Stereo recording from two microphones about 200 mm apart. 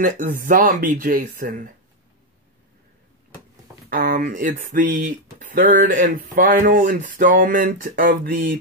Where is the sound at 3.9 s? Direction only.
45° right (ahead or behind).